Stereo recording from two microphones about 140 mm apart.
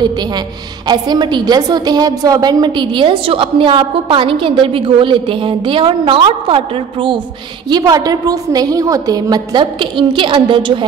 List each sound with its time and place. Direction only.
0.8 s a woman's voice: 30° right (ahead or behind)
7.7 s a woman's voice: 25° right (ahead or behind)